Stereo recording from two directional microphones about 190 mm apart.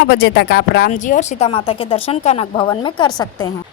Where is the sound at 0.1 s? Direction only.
55° left (ahead or behind).